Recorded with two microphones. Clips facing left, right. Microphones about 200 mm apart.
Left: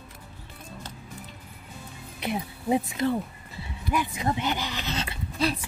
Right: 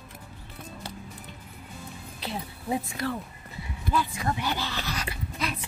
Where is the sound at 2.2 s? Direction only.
20° left (ahead or behind).